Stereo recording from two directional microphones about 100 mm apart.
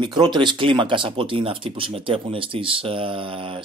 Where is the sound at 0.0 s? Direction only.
50° right (ahead or behind).